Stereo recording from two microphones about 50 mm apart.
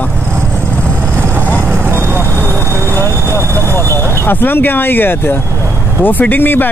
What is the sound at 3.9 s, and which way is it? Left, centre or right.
Speech, left.